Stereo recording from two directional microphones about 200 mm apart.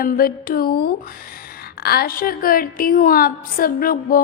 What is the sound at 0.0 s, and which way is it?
A woman's voice, 45° left (ahead or behind).